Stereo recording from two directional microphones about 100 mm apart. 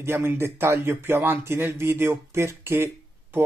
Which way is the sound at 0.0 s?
25° right (ahead or behind).